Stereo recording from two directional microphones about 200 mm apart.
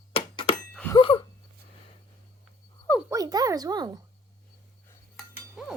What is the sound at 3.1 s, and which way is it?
Speech, 20° right (ahead or behind).